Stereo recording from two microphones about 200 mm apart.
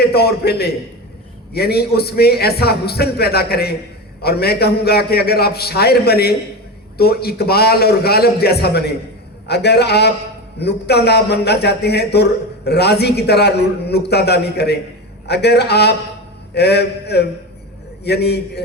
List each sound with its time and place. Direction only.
0.0 s a man's voice: 55° left (ahead or behind)